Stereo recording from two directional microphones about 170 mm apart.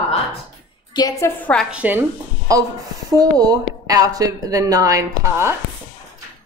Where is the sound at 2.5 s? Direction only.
20° right (ahead or behind).